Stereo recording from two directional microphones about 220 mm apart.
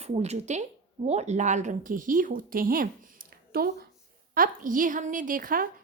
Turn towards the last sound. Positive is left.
turn(degrees=-40)  # may be behind; listen again after turning